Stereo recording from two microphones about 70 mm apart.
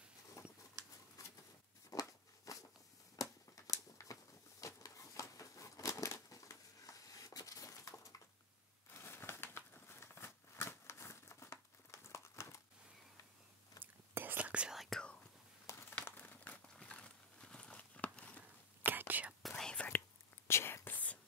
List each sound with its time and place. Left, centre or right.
0.4 s a sound: left
0.8 s patter: right
1.9 s a sound: left
8.9 s a sound: left
13.8 s whispering: left
14.1 s whispering: right
14.7 s whispering: centre
16.1 s crumpling: left
16.7 s a sound: centre
18.9 s whispering: right
19.5 s whispering: centre
20.4 s whispering: left